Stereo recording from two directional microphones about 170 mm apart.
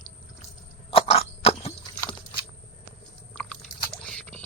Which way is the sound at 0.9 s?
35° left (ahead or behind).